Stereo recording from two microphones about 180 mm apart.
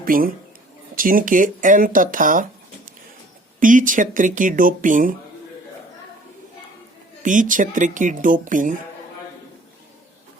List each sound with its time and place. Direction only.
0.0 s speech: 50° right (ahead or behind)
3.6 s speech: 45° right (ahead or behind)
7.2 s speech: 45° right (ahead or behind)